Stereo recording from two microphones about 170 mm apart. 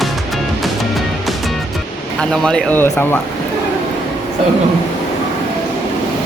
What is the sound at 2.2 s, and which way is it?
Speech, 5° left (ahead or behind).